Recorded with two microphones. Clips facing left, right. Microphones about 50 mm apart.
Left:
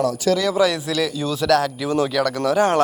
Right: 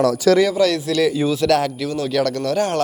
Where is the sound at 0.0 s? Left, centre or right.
Right.